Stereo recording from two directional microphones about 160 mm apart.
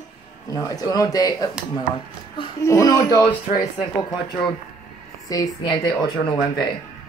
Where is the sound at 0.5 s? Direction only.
20° left (ahead or behind).